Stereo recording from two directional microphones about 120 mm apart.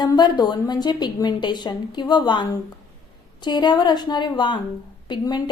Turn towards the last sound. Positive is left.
turn(degrees=40)  # may be behind; listen again after turning